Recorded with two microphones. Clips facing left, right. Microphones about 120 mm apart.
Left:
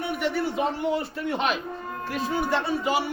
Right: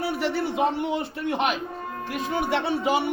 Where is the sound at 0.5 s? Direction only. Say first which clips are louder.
Right 1 dB; 20° right (ahead or behind).